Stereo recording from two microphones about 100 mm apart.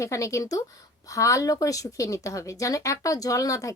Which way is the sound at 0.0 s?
30° left (ahead or behind).